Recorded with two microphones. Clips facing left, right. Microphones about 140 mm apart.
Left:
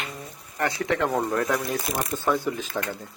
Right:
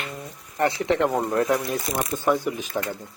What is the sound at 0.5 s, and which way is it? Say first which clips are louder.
Speech: right 4 dB; 20° right (ahead or behind).